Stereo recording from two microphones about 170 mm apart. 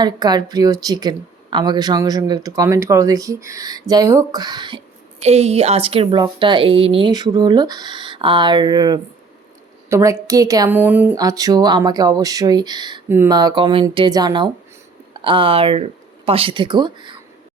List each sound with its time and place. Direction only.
0.0 s a woman's voice: 25° right (ahead or behind)
5.2 s a woman's voice: 40° right (ahead or behind); by 11.2 s 10° right (ahead or behind)
11.2 s a woman's voice: 20° right (ahead or behind)